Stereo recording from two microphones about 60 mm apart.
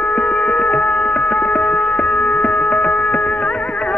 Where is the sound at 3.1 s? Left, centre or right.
Centre.